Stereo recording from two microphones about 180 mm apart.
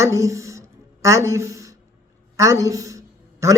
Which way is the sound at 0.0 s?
15° right (ahead or behind).